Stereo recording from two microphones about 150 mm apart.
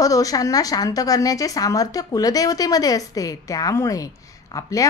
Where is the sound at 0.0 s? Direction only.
25° left (ahead or behind).